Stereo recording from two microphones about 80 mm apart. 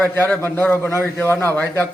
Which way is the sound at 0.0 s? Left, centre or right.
Left.